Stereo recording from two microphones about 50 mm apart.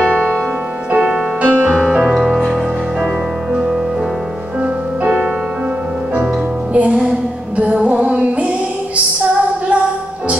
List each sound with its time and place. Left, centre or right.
0.0 s music: right; by 2.5 s centre
6.7 s music: right
8.9 s female singing: right